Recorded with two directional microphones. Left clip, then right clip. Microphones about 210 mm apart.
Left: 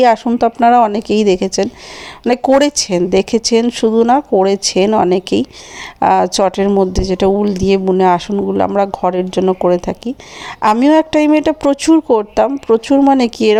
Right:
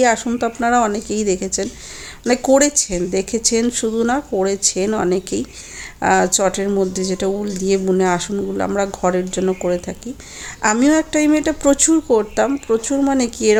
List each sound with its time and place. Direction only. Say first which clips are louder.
0.3 s speech: left 8 dB; 30° left (ahead or behind)